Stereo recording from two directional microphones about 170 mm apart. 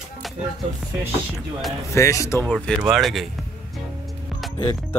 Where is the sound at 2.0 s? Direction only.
20° left (ahead or behind).